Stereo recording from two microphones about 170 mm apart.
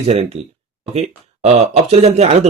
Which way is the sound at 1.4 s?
40° right (ahead or behind).